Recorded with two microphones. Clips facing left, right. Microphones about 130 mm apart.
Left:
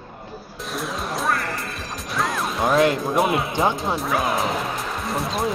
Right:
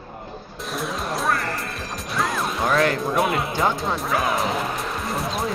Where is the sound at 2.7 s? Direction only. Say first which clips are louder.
Left 3 dB; 25° left (ahead or behind).